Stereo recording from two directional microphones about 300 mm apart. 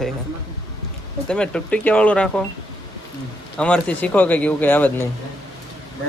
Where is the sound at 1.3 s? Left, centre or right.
Centre.